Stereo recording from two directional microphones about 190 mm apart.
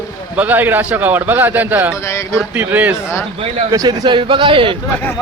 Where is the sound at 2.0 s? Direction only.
15° left (ahead or behind).